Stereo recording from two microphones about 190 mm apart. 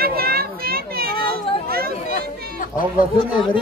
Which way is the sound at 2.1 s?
45° left (ahead or behind).